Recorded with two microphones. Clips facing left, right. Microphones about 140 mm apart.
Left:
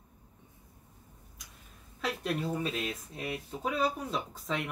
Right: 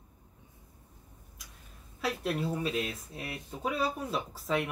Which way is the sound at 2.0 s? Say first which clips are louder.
Right 1 dB; 5° right (ahead or behind).